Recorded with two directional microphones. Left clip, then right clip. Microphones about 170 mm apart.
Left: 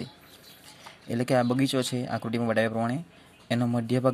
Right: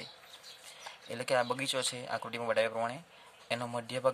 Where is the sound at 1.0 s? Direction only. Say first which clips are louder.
Left 6 dB; 20° left (ahead or behind).